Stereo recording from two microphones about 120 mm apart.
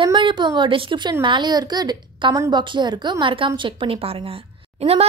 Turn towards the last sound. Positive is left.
turn(degrees=-55)  # may be behind; listen again after turning